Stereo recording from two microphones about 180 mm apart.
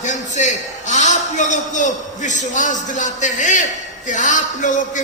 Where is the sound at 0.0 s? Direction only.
40° left (ahead or behind).